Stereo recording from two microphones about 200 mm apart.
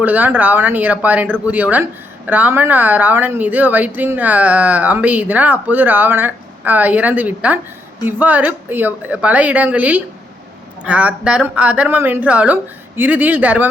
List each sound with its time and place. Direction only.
0.0 s speech: 10° right (ahead or behind)